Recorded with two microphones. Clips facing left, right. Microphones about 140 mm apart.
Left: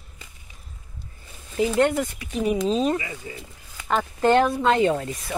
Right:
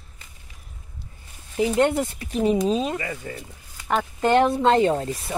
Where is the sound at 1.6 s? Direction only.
20° right (ahead or behind).